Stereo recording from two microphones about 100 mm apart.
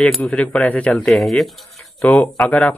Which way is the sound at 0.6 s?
15° left (ahead or behind).